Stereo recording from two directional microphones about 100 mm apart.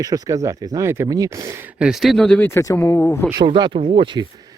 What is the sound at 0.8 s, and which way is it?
Speech, 25° right (ahead or behind).